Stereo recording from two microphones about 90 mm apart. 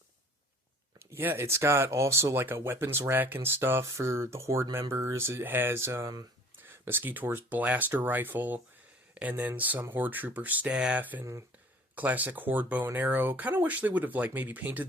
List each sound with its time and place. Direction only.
0.9 s speech: 25° right (ahead or behind)